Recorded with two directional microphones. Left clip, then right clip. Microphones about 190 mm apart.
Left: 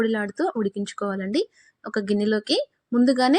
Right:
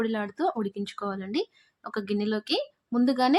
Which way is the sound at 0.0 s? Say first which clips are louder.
Left 4 dB; 15° left (ahead or behind).